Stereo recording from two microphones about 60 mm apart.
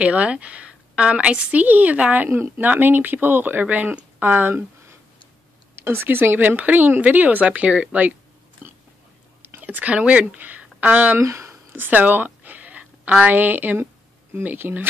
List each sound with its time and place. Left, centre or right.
0.0 s speech: right
2.2 s speech: right
9.4 s speech: right
11.1 s speech: right
11.7 s a sound: right
14.3 s speech: right